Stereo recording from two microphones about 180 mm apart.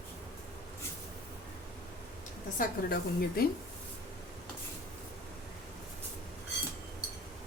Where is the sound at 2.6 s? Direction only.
55° left (ahead or behind).